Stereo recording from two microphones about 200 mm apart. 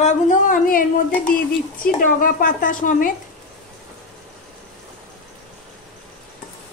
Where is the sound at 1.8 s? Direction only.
45° left (ahead or behind).